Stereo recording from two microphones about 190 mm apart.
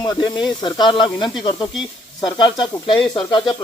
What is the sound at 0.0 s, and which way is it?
Speech, 20° left (ahead or behind).